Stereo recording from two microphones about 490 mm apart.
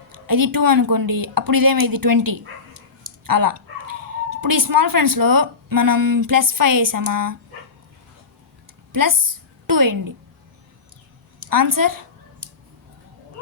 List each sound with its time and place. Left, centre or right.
0.1 s a woman's voice: right
8.9 s a woman's voice: right
11.4 s a woman's voice: right